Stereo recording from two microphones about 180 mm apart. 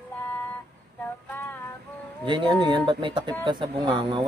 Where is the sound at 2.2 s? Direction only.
25° right (ahead or behind).